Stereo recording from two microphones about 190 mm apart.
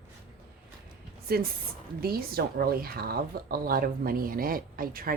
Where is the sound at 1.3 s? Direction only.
50° right (ahead or behind).